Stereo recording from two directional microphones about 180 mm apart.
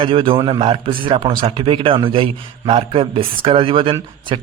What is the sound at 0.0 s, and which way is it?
A man's voice, 30° right (ahead or behind).